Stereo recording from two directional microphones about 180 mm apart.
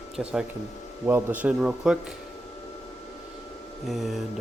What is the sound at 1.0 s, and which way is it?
A man's voice, 10° right (ahead or behind).